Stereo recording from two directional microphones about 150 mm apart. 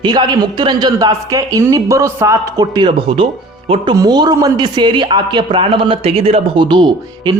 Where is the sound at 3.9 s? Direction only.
25° right (ahead or behind).